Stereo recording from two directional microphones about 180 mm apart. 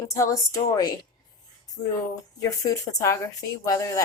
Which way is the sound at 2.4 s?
20° left (ahead or behind).